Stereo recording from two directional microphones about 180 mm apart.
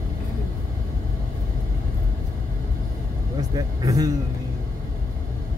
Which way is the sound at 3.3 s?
20° right (ahead or behind).